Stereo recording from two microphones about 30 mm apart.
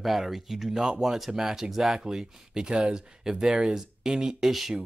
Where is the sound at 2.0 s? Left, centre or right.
Centre.